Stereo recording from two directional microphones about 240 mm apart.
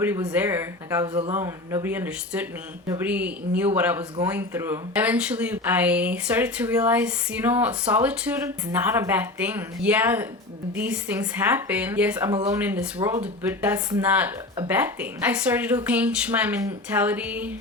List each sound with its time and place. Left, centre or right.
0.0 s a woman's voice: centre
12.3 s a woman's voice: centre